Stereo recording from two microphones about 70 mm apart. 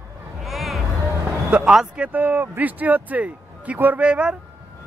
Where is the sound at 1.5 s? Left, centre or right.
Centre.